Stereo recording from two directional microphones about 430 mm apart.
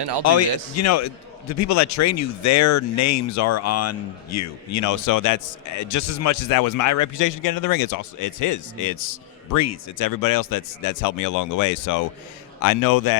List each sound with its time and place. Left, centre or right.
0.3 s a man's voice: left